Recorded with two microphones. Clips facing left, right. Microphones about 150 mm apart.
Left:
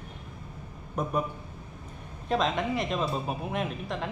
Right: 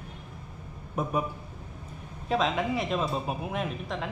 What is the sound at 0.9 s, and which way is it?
Speech, 5° right (ahead or behind).